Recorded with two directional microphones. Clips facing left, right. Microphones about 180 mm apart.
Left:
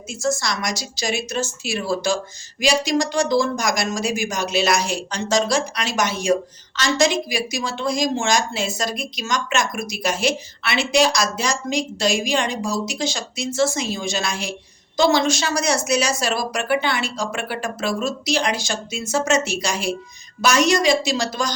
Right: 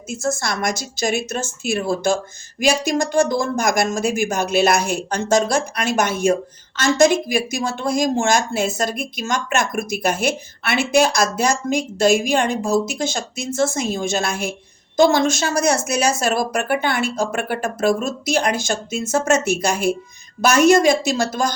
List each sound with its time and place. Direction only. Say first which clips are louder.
0.1 s speech: even; 55° right (ahead or behind)